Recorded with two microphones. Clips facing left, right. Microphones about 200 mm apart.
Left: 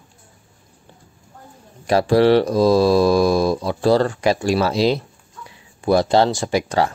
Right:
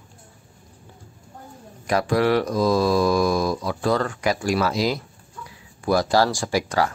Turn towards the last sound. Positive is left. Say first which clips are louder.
# left 3 dB
turn(degrees=25)  # may be behind; listen again after turning